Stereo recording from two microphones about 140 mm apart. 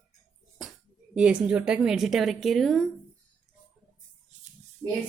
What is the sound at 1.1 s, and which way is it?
A woman's voice, 5° right (ahead or behind).